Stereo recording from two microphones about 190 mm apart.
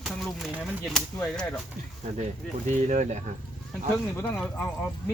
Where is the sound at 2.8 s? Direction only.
40° right (ahead or behind).